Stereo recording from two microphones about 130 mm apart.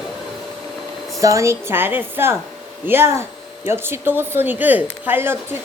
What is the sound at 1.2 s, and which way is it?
A woman's voice, 25° right (ahead or behind).